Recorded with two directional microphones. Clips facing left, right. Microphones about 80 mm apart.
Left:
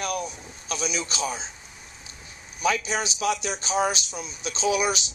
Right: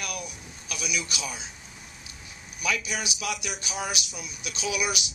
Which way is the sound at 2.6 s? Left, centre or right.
Left.